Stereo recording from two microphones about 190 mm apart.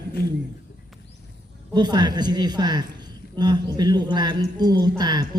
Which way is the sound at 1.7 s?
20° right (ahead or behind).